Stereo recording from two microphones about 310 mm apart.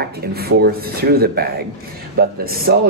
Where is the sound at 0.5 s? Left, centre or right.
Right.